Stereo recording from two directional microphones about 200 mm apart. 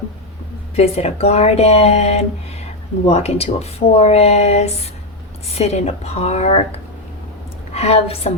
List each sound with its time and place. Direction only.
0.8 s speech: 30° left (ahead or behind)
7.7 s a woman's voice: 30° left (ahead or behind)